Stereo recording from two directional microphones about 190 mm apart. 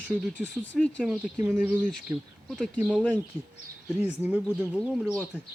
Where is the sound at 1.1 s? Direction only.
5° right (ahead or behind).